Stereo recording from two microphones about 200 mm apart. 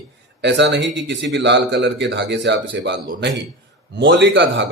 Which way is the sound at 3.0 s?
45° right (ahead or behind).